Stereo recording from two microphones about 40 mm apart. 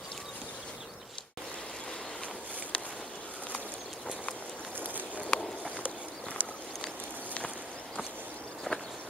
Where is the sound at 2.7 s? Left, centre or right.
Left.